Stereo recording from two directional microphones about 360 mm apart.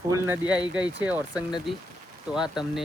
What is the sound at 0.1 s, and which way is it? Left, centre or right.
Speech, centre.